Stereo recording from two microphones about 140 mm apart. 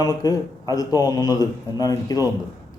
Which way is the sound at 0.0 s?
25° left (ahead or behind).